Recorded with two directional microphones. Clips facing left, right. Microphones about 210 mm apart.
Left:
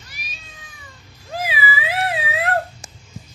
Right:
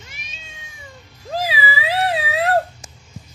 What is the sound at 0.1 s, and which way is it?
Cat, 25° right (ahead or behind).